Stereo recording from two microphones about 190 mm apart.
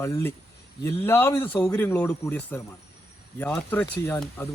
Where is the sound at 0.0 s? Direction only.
10° left (ahead or behind).